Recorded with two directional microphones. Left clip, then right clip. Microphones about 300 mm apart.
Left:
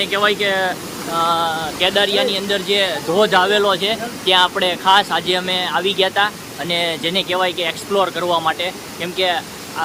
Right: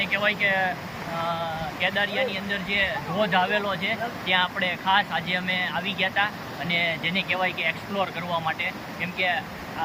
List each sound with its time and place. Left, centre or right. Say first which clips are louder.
0.0 s speech: left 7 dB; centre